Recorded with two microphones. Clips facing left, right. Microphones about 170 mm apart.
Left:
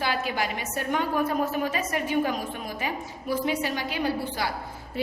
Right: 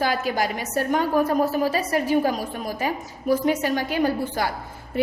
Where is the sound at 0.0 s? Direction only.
40° right (ahead or behind).